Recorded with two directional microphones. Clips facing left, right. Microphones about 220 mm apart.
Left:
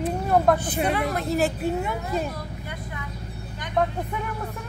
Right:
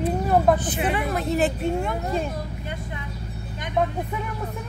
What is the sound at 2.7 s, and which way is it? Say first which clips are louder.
Vehicle: right 2 dB; 25° right (ahead or behind).